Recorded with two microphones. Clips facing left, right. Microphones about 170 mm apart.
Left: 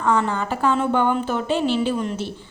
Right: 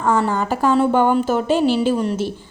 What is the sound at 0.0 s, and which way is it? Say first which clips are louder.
A woman's voice: right 2 dB; 40° right (ahead or behind).